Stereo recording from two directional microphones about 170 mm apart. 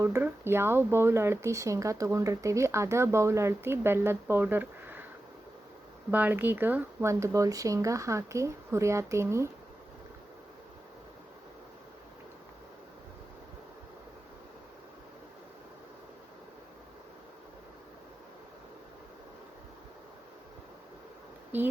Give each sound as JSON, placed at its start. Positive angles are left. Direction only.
{"t": 0.0, "sound": "speech", "side_deg": -15}
{"t": 6.1, "sound": "speech", "side_deg": -10}
{"t": 21.5, "sound": "speech", "side_deg": -10}